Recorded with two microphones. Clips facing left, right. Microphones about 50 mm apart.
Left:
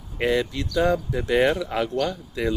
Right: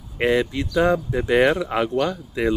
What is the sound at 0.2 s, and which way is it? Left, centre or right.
Speech, centre.